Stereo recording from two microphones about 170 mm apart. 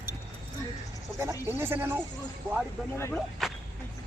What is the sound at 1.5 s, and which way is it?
Speech, 15° right (ahead or behind).